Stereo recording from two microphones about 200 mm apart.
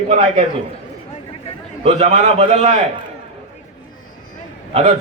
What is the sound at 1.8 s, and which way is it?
A man's voice, 30° right (ahead or behind).